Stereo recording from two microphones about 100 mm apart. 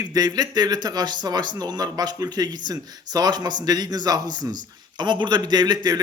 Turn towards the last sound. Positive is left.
turn(degrees=-45)  # may be behind; listen again after turning